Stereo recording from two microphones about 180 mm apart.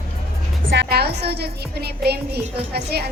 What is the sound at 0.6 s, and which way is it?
A woman's voice, 70° right (ahead or behind).